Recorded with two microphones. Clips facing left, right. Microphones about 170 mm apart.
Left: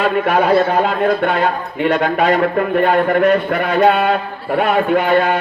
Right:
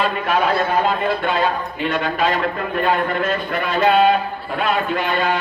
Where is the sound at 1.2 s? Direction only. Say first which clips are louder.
Left 3 dB; 65° left (ahead or behind).